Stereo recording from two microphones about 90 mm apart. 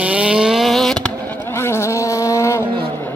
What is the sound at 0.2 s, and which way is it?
Vehicle, 10° right (ahead or behind).